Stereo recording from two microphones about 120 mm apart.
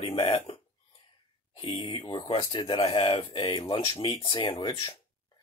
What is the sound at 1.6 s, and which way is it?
Speech, 45° left (ahead or behind).